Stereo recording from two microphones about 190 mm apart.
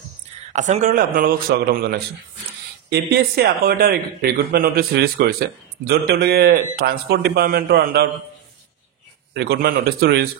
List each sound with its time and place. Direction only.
0.5 s a man's voice: 40° right (ahead or behind); by 8.1 s 55° right (ahead or behind)
9.3 s a man's voice: 60° right (ahead or behind)